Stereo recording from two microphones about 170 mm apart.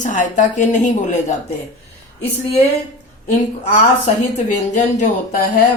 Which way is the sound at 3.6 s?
45° left (ahead or behind).